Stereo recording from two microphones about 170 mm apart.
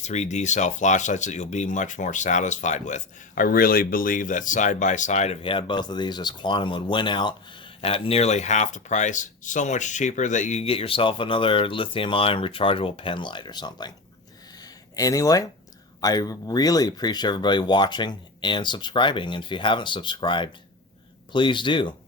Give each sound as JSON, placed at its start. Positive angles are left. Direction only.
{"t": 0.0, "sound": "speech", "side_deg": 40}
{"t": 14.6, "sound": "a sound", "side_deg": 20}
{"t": 16.0, "sound": "speech", "side_deg": 20}